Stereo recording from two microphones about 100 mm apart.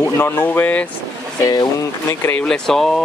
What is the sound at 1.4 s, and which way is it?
Speech, 35° left (ahead or behind).